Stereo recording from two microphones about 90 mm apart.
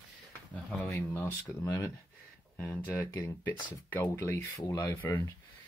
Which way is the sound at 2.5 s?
20° left (ahead or behind).